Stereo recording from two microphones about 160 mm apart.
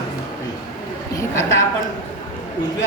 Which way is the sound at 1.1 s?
15° left (ahead or behind).